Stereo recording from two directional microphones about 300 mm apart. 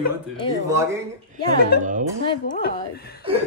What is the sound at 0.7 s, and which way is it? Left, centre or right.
Speech, centre.